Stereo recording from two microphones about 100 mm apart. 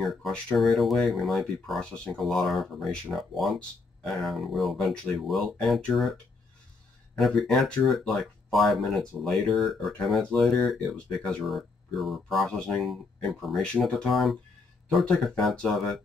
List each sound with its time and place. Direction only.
0.0 s speech: centre (ahead or behind)
7.2 s speech: centre (ahead or behind)